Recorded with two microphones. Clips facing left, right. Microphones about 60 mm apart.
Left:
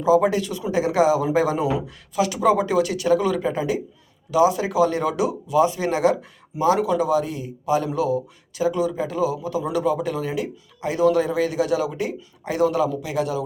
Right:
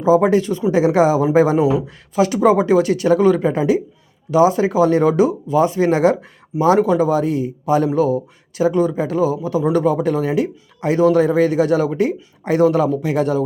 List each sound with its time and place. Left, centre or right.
0.0 s speech: right